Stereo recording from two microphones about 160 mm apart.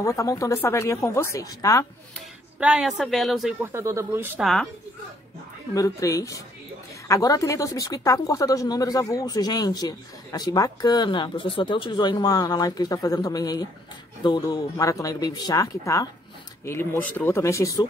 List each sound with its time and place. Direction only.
0.0 s speech: 20° left (ahead or behind)
2.6 s speech: 5° right (ahead or behind)
3.5 s speech: 15° right (ahead or behind)
4.4 s speech: centre (ahead or behind)
5.8 s speech: 20° left (ahead or behind)